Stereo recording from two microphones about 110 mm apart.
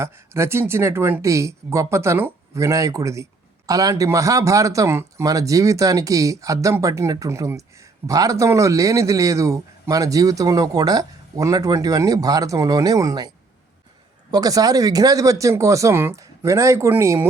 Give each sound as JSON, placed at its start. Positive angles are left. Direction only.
{"t": 0.0, "sound": "speech", "side_deg": -25}